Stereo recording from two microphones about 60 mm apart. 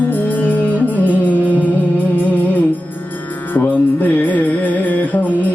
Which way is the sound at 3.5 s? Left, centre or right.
Left.